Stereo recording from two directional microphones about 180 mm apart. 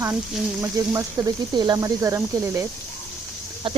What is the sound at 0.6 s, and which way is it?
Speech, 20° right (ahead or behind).